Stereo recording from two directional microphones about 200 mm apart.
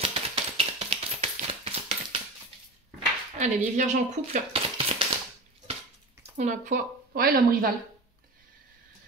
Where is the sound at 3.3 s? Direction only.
35° right (ahead or behind).